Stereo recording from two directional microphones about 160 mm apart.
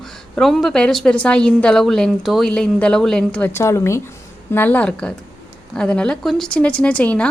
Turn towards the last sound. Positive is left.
turn(degrees=10)  # may be behind; listen again after turning